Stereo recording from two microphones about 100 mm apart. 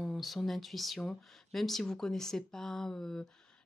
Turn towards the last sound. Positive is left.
turn(degrees=5)  # may be behind; listen again after turning